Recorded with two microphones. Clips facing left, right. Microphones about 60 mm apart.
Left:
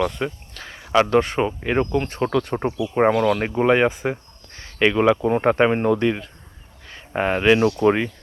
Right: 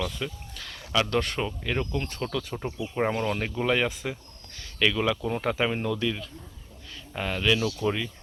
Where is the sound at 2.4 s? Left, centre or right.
Left.